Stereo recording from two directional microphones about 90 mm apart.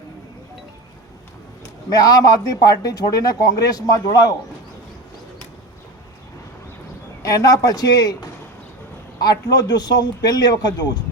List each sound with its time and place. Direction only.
1.9 s a man's voice: 45° left (ahead or behind)
7.2 s a man's voice: 40° left (ahead or behind)
9.2 s a man's voice: 50° left (ahead or behind)